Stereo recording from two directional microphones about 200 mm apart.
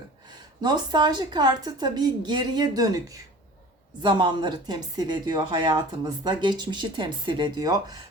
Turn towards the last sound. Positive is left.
turn(degrees=-20)  # may be behind; listen again after turning